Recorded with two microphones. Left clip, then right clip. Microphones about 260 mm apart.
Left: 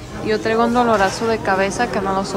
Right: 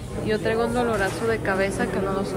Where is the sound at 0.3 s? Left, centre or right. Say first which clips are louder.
Left 6 dB; centre.